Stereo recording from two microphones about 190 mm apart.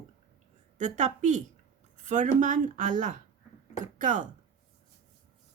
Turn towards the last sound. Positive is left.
turn(degrees=-45)  # may be behind; listen again after turning